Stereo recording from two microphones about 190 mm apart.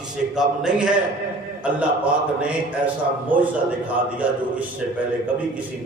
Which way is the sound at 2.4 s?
5° right (ahead or behind).